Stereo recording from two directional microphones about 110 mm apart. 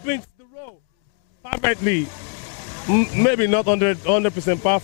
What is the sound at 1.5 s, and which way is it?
Speech, 15° left (ahead or behind).